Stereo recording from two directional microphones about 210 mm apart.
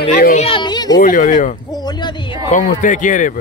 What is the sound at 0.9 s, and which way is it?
Speech, 40° left (ahead or behind).